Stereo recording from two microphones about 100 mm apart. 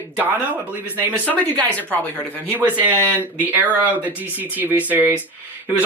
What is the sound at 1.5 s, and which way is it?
Speech, 15° left (ahead or behind).